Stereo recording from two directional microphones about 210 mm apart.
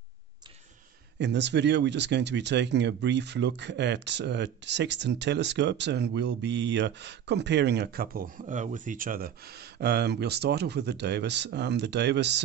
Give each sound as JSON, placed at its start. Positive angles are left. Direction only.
{"t": 1.1, "sound": "speech", "side_deg": -55}